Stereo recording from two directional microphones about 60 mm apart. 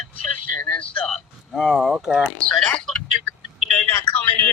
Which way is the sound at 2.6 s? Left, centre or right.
Centre.